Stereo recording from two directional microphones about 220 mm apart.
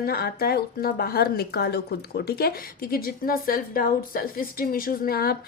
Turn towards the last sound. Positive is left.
turn(degrees=45)  # may be behind; listen again after turning